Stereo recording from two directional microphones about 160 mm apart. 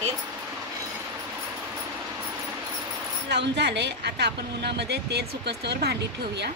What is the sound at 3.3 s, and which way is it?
A woman's voice, 90° right.